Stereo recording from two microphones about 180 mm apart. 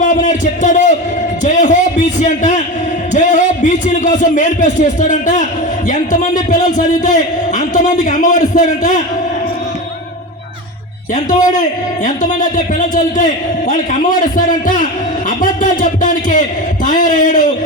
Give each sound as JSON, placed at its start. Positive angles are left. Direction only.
{"t": 0.0, "sound": "a sound", "side_deg": 45}
{"t": 3.1, "sound": "a man's voice", "side_deg": 45}
{"t": 12.0, "sound": "a man's voice", "side_deg": 45}